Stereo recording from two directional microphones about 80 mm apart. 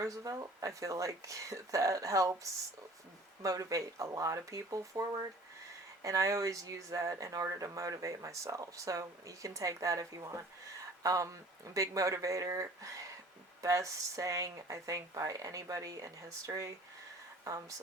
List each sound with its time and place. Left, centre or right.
0.0 s speech: right
3.4 s speech: right